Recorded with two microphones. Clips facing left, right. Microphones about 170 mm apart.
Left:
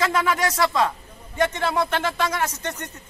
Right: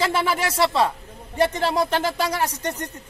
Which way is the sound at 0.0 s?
30° right (ahead or behind).